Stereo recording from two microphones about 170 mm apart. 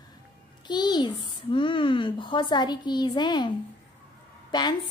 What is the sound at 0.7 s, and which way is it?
A woman's voice, 25° left (ahead or behind).